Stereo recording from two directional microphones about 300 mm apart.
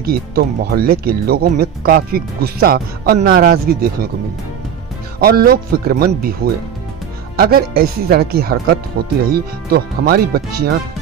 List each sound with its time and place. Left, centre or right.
0.0 s speech: right
5.2 s speech: right